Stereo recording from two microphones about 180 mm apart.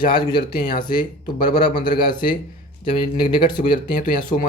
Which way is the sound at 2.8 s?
25° left (ahead or behind).